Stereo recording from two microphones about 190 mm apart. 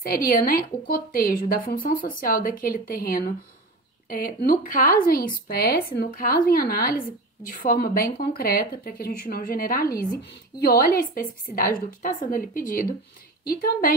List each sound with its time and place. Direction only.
0.0 s speech: 50° left (ahead or behind)